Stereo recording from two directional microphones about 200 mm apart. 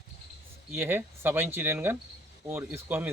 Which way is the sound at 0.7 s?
10° right (ahead or behind).